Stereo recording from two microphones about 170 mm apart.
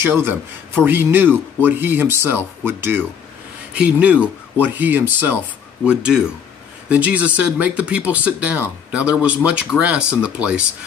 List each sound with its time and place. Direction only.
0.0 s speech: 10° right (ahead or behind)